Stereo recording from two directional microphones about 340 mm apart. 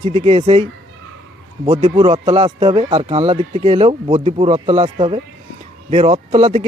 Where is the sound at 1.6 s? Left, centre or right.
Centre.